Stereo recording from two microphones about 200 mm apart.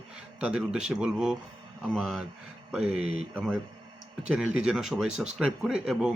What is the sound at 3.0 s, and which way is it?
Speech, 30° right (ahead or behind).